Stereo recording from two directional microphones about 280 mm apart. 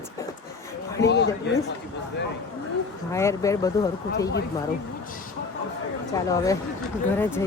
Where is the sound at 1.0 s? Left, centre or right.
Left.